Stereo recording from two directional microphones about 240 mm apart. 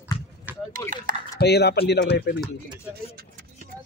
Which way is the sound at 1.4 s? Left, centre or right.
Left.